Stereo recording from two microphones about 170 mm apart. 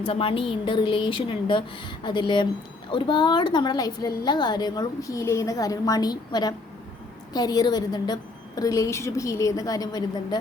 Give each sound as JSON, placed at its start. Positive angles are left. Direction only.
{"t": 0.0, "sound": "a woman's voice", "side_deg": 30}